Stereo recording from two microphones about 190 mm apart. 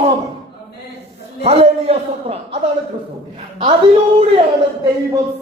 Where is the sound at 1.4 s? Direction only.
35° right (ahead or behind).